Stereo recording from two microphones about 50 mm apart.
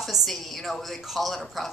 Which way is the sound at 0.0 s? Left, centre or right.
Centre.